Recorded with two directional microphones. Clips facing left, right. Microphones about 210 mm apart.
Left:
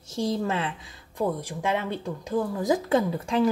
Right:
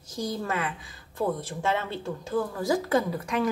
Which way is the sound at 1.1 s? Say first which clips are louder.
Left 1 dB; 15° left (ahead or behind).